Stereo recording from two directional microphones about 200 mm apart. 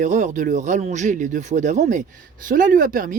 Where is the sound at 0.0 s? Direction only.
35° right (ahead or behind).